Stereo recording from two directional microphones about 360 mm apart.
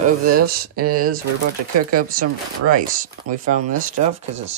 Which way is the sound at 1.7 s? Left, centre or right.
Right.